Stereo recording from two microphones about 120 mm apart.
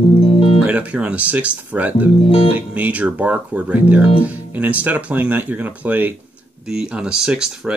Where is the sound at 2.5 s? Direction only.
10° right (ahead or behind).